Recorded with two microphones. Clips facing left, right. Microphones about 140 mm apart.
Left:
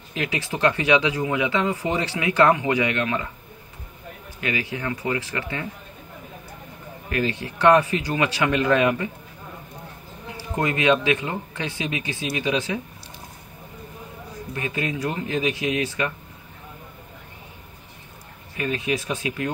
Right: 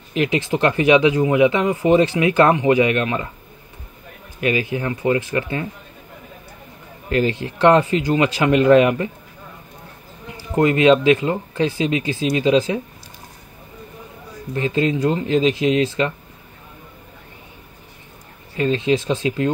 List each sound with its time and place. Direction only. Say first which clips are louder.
0.1 s speech: right 8 dB; 25° right (ahead or behind)
4.4 s speech: right 7 dB; 25° right (ahead or behind)
7.1 s speech: right 6 dB; 25° right (ahead or behind)
10.6 s speech: right 7 dB; 30° right (ahead or behind)
14.5 s speech: right 8 dB; 30° right (ahead or behind)
18.6 s speech: right 7 dB; 25° right (ahead or behind)